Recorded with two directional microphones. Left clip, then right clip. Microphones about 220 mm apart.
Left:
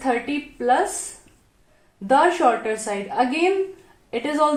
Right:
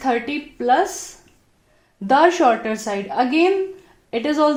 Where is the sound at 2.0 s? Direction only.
40° right (ahead or behind).